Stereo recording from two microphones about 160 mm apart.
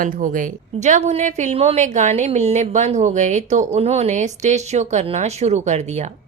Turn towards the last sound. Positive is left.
turn(degrees=-45)  # may be behind; listen again after turning